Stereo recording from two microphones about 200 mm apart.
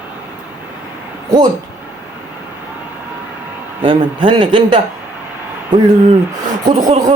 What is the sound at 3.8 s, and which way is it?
Speech, 25° right (ahead or behind).